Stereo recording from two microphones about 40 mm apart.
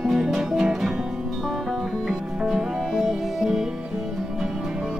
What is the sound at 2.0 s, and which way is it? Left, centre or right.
Music, centre.